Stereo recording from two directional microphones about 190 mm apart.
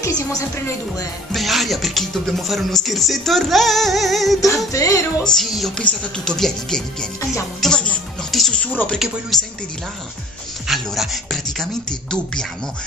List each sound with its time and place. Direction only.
0.0 s speech: 15° left (ahead or behind)
1.3 s speech: centre (ahead or behind)
4.7 s speech: 15° left (ahead or behind)
5.2 s speech: centre (ahead or behind)
10.7 s music: centre (ahead or behind)
11.5 s speech: centre (ahead or behind)